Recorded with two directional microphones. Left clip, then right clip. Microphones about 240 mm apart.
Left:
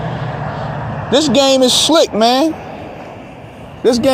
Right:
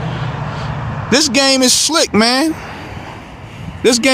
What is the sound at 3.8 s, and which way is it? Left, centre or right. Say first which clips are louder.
Speech: even; right.